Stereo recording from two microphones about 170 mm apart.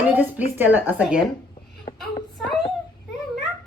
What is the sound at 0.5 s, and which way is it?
Speech, 10° right (ahead or behind).